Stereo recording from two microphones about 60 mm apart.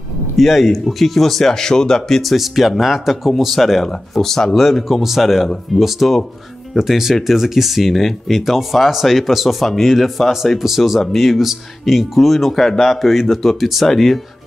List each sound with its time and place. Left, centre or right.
0.4 s speech: centre